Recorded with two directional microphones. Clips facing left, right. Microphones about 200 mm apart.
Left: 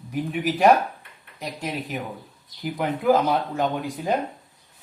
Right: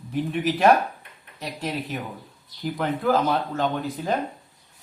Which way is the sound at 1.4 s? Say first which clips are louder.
Even; 10° left (ahead or behind).